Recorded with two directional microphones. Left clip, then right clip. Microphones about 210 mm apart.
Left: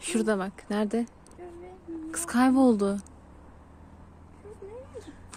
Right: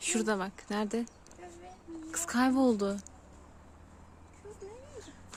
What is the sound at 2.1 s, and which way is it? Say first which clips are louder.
Speech: left 5 dB; 10° left (ahead or behind).